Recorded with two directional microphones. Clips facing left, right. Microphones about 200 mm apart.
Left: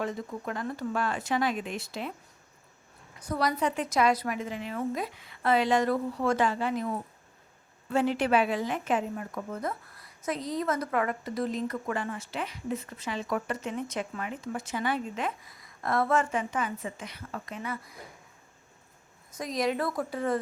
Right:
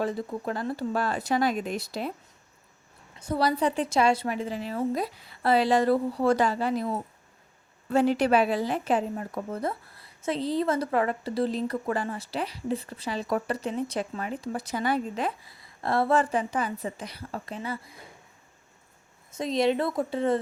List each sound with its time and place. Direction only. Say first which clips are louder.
0.0 s a woman's voice: right 4 dB; 35° right (ahead or behind)
3.2 s a woman's voice: right 3 dB; 30° right (ahead or behind)
19.3 s a woman's voice: right 5 dB; 25° right (ahead or behind)